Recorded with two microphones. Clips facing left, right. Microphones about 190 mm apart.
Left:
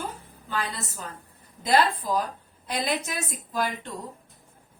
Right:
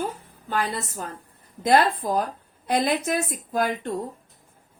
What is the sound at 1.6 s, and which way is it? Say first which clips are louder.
A woman's voice: right 3 dB; 55° right (ahead or behind).